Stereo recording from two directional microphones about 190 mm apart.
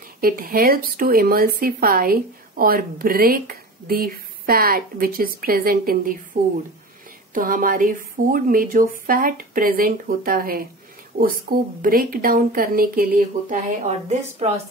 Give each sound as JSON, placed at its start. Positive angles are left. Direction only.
{"t": 0.2, "sound": "speech", "side_deg": -50}